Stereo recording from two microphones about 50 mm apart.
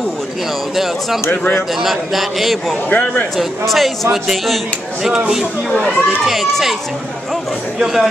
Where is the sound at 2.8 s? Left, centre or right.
Left.